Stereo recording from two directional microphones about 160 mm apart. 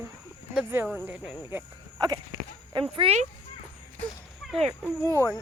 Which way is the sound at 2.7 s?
35° right (ahead or behind).